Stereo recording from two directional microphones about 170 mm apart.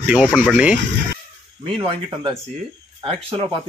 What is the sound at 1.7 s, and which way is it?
Speech, 35° right (ahead or behind).